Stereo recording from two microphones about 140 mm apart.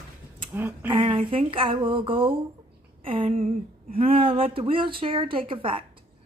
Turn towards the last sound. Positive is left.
turn(degrees=-40)  # may be behind; listen again after turning